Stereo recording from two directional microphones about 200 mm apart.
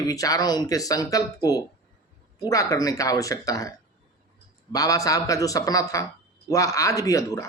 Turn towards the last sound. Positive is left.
turn(degrees=15)  # may be behind; listen again after turning